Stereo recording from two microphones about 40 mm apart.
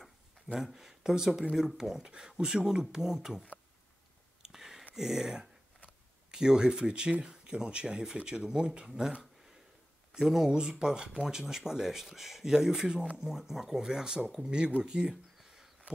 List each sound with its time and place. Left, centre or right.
0.6 s speech: centre
4.4 s a sound: centre
4.9 s speech: centre; by 8.9 s right
10.1 s speech: centre
10.5 s speech: centre
14.8 s a sound: centre